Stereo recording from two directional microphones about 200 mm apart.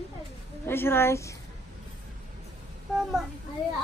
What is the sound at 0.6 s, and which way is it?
Speech, 10° left (ahead or behind).